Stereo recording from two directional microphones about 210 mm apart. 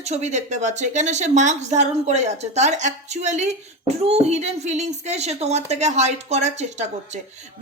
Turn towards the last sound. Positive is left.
turn(degrees=-30)  # may be behind; listen again after turning